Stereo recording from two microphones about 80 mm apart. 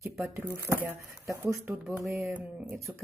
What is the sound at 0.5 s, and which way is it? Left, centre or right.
Speech, right.